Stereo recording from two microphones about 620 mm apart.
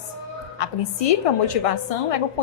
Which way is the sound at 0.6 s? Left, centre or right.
Left.